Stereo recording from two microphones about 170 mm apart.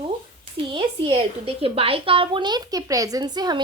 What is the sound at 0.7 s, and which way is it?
Speech, 30° right (ahead or behind).